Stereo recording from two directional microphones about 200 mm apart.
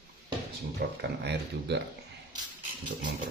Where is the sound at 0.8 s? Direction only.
50° right (ahead or behind).